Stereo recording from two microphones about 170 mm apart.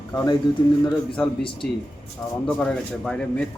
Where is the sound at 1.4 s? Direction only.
30° left (ahead or behind).